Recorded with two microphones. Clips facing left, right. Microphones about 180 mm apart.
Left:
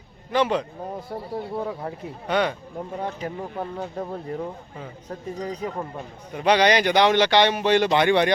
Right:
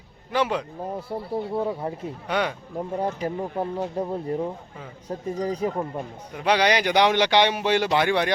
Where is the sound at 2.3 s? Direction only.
10° right (ahead or behind).